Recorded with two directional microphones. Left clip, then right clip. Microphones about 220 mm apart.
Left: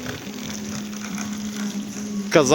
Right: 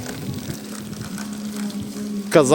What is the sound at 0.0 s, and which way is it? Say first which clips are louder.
Vehicle: even; 35° right (ahead or behind).